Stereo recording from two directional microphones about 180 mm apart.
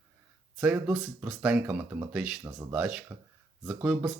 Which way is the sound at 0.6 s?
5° right (ahead or behind).